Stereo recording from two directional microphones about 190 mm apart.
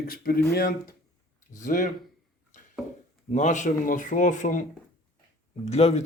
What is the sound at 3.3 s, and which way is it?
Speech, 40° left (ahead or behind).